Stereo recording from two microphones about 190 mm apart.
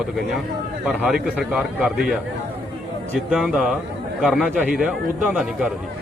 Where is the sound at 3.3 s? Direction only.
5° right (ahead or behind).